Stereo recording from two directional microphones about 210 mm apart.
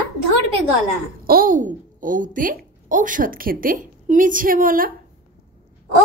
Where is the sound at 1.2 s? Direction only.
40° right (ahead or behind).